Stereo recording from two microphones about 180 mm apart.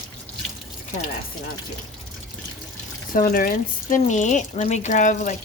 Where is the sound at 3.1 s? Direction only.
50° left (ahead or behind).